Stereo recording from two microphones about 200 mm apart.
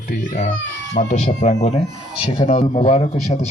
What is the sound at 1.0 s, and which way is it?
A man's voice, 35° left (ahead or behind).